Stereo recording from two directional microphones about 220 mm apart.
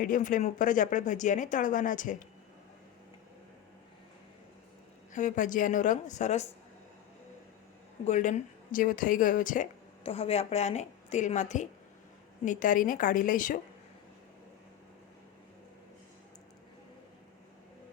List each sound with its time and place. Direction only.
0.0 s speech: 35° left (ahead or behind)
5.1 s speech: 35° left (ahead or behind)
8.0 s speech: 35° left (ahead or behind)